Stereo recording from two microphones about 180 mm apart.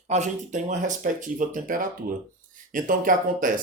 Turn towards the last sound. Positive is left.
turn(degrees=-50)  # may be behind; listen again after turning